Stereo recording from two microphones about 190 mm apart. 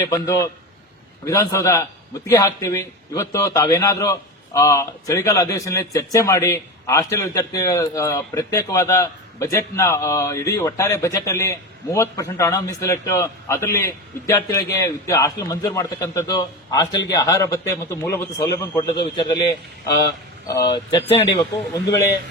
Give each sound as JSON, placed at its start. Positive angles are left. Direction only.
{"t": 0.0, "sound": "a man's voice", "side_deg": 15}